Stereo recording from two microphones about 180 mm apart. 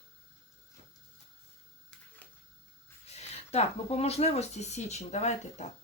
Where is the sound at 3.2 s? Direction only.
35° left (ahead or behind).